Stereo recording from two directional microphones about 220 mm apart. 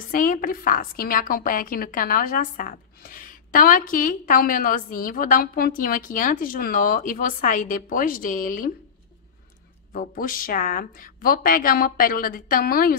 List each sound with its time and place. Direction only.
0.1 s a woman's voice: 40° left (ahead or behind)
9.9 s a woman's voice: 40° left (ahead or behind)